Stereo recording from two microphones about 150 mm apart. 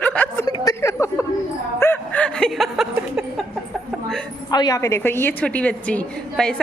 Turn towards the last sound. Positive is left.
turn(degrees=5)  # may be behind; listen again after turning